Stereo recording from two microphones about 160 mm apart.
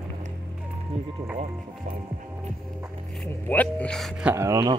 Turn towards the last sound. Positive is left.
turn(degrees=-20)  # may be behind; listen again after turning